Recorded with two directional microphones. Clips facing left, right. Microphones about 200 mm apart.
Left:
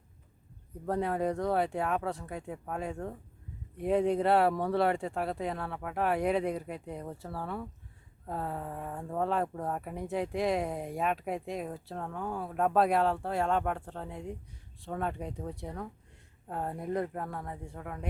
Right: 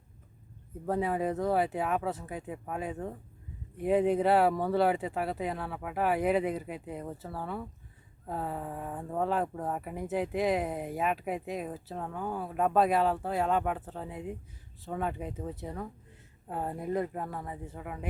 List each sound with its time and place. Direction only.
0.9 s speech: 5° right (ahead or behind)